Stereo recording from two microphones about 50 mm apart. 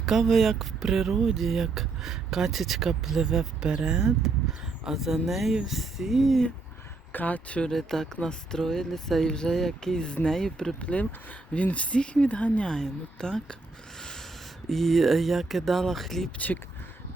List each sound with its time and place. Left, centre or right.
0.0 s speech: centre
3.3 s speech: centre
7.1 s speech: left
7.7 s speech: centre
10.8 s speech: left
12.6 s speech: centre
14.0 s a sound: centre
14.7 s speech: centre